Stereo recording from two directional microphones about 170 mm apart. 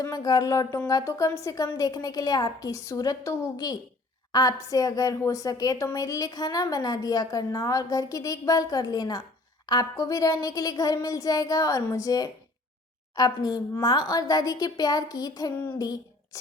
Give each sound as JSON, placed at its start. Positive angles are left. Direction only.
{"t": 0.0, "sound": "a woman's voice", "side_deg": 20}